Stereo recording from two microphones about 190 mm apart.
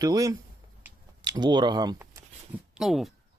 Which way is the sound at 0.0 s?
20° right (ahead or behind).